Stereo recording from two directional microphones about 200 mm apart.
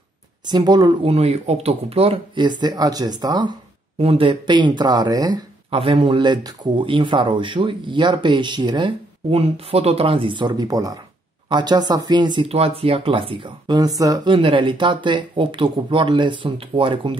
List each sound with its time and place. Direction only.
0.5 s speech: 20° right (ahead or behind)